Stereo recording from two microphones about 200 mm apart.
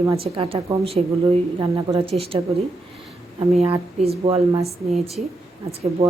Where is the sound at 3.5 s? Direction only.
30° right (ahead or behind).